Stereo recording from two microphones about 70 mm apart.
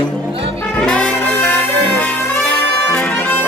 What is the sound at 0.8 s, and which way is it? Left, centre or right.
Brass instrument, centre.